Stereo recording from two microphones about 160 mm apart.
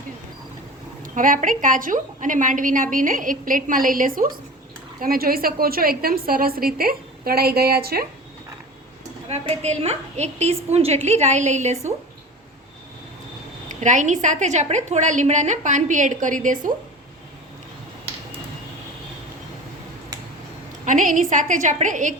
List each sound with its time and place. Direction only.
1.0 s a woman's voice: 55° right (ahead or behind); by 8.0 s 75° right (ahead or behind)
9.3 s a woman's voice: 45° right (ahead or behind)
13.7 s a woman's voice: 50° right (ahead or behind)
20.8 s a woman's voice: 55° right (ahead or behind)